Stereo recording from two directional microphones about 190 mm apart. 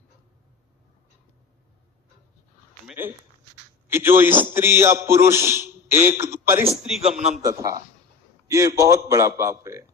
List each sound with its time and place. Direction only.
2.8 s a man's voice: 10° right (ahead or behind)
6.8 s a man's voice: 5° right (ahead or behind)
7.4 s a man's voice: 15° right (ahead or behind)